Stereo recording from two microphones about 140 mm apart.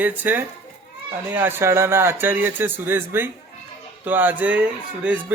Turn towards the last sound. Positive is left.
turn(degrees=-10)  # may be behind; listen again after turning